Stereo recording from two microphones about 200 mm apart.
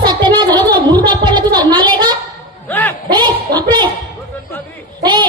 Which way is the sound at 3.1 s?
20° right (ahead or behind).